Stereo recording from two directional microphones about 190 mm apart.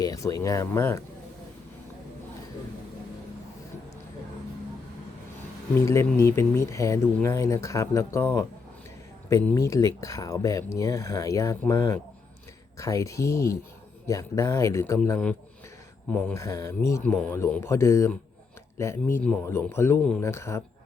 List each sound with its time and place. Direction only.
0.0 s speech: 20° left (ahead or behind)
5.8 s speech: 15° left (ahead or behind)